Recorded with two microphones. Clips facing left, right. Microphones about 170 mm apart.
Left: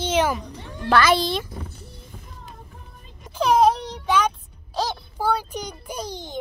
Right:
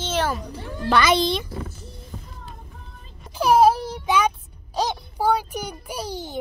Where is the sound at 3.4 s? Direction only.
5° right (ahead or behind).